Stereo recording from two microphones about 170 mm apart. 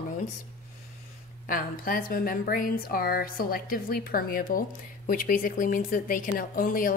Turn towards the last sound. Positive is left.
turn(degrees=55)  # may be behind; listen again after turning